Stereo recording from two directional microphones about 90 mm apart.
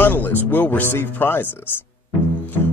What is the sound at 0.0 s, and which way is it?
Speech, 20° left (ahead or behind).